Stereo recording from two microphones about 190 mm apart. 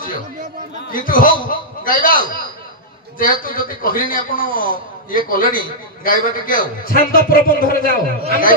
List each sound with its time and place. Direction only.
0.9 s a man's voice: 45° left (ahead or behind)